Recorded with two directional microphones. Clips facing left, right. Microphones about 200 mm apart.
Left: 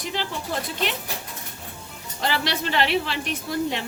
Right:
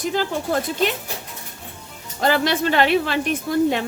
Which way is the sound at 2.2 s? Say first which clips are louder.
Right 7 dB; 50° right (ahead or behind).